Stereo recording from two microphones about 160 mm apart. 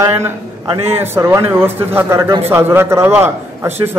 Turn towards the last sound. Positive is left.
turn(degrees=-15)  # may be behind; listen again after turning